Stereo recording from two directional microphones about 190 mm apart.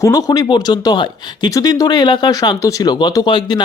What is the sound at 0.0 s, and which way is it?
Speech, 20° left (ahead or behind).